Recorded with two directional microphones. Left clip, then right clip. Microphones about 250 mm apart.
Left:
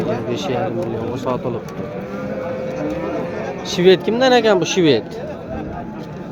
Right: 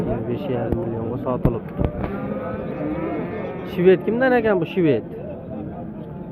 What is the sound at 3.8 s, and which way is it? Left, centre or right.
Speech, centre.